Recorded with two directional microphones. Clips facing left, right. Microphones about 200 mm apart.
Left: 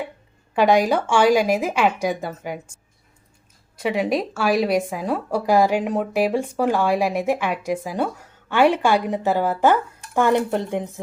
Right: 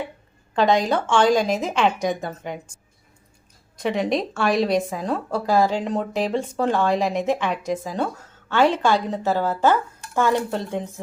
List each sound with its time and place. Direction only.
0.5 s speech: 10° left (ahead or behind)
3.8 s speech: 5° left (ahead or behind)